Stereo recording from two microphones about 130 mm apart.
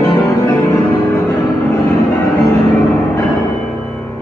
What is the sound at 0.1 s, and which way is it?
Music, 25° left (ahead or behind).